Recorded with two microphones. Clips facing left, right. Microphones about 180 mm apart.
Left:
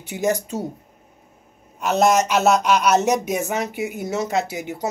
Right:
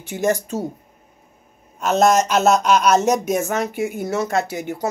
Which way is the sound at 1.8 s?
15° left (ahead or behind).